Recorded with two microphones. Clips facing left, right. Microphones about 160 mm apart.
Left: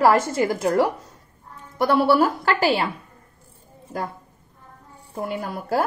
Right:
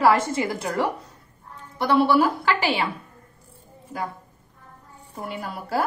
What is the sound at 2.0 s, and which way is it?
Speech, 45° left (ahead or behind).